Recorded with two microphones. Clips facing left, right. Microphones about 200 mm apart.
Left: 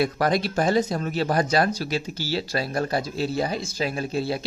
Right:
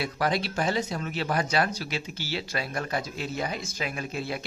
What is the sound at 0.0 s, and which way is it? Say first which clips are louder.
A woman's voice: left 5 dB; 45° left (ahead or behind).